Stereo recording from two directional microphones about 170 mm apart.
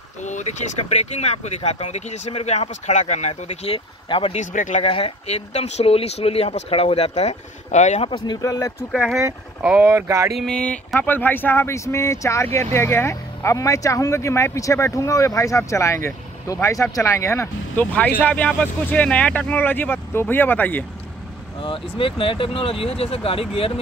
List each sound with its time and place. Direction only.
0.2 s speech: 45° left (ahead or behind)
4.4 s speech: 45° left (ahead or behind)
4.8 s speech: 35° left (ahead or behind)
8.1 s speech: 20° left (ahead or behind)
8.9 s speech: centre (ahead or behind); by 10.3 s 15° right (ahead or behind)
10.3 s speech: 5° left (ahead or behind)
21.6 s speech: 30° left (ahead or behind)